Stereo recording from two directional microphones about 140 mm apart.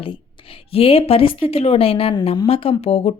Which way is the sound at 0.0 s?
40° left (ahead or behind).